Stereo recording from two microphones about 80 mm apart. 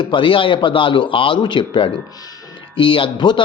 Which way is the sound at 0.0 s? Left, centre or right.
Left.